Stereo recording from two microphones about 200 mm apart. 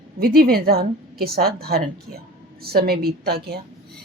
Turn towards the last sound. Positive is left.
turn(degrees=-55)  # may be behind; listen again after turning